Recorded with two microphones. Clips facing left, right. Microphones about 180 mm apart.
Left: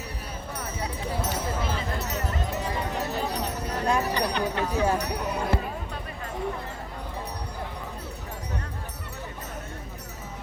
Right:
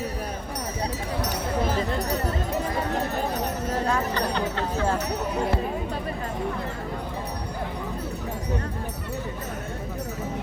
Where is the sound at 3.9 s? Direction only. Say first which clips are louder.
Left 4 dB; 15° left (ahead or behind).